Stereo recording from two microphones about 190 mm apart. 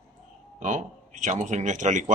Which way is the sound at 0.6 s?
40° right (ahead or behind).